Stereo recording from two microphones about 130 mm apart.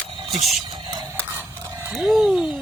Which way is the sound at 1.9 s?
Centre (ahead or behind).